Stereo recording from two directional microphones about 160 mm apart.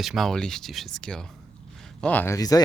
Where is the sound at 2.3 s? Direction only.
25° left (ahead or behind).